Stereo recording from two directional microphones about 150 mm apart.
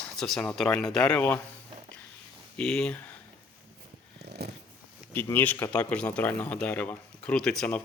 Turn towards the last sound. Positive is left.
turn(degrees=5)  # may be behind; listen again after turning